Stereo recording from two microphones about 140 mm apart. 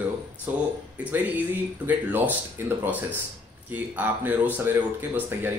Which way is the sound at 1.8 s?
15° right (ahead or behind).